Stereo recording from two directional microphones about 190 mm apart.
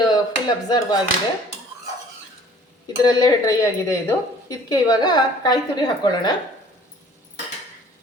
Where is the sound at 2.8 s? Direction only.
20° left (ahead or behind).